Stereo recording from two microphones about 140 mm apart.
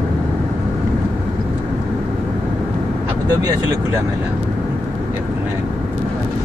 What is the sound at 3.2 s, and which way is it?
Speech, 25° right (ahead or behind).